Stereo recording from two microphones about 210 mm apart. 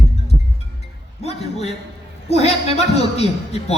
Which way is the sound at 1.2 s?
30° left (ahead or behind).